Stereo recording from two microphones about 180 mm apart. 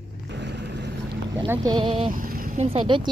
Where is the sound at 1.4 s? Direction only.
25° right (ahead or behind).